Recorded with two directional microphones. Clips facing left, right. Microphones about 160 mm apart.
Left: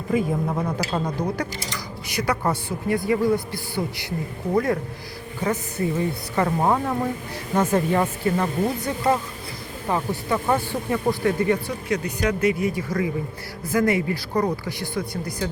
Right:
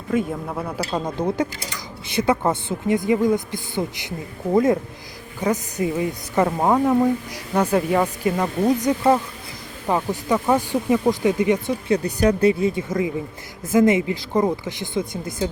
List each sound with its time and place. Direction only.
0.1 s a woman's voice: 5° left (ahead or behind)
1.0 s a woman's voice: 20° right (ahead or behind)
9.9 s a woman's voice: 15° right (ahead or behind)
12.0 s speech: 35° right (ahead or behind)